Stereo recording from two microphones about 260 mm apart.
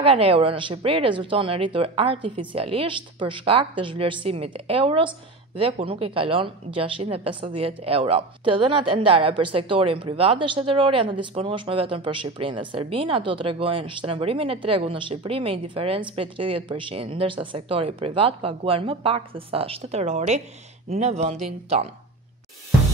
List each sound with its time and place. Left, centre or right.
0.0 s a woman's voice: right